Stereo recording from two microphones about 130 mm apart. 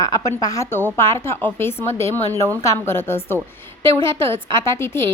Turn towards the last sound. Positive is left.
turn(degrees=20)  # may be behind; listen again after turning